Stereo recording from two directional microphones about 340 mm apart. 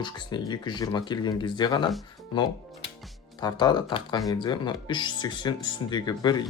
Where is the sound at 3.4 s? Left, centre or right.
Centre.